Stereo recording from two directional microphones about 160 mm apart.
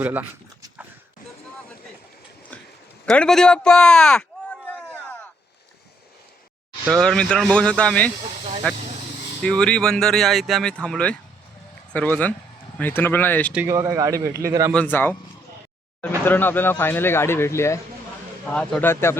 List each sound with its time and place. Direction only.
0.0 s speech: 10° right (ahead or behind)
3.1 s speech: 5° left (ahead or behind)
6.8 s speech: centre (ahead or behind)
8.2 s speech: 45° right (ahead or behind)
9.4 s speech: 5° left (ahead or behind)
13.5 s a man's voice: 15° right (ahead or behind)
14.7 s speech: 10° left (ahead or behind)
18.5 s speech: 5° left (ahead or behind)